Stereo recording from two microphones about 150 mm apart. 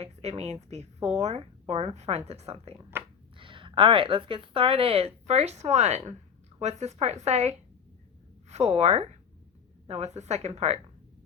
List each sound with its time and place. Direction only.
0.0 s speech: 45° right (ahead or behind)
2.9 s a sound: 15° right (ahead or behind)
3.3 s a woman's voice: 35° right (ahead or behind)